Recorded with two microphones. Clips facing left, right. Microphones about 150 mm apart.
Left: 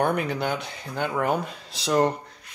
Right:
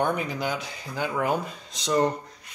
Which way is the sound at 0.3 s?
60° left (ahead or behind).